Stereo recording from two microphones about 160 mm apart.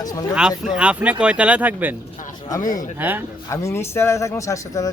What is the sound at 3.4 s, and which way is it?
Speech, 15° left (ahead or behind).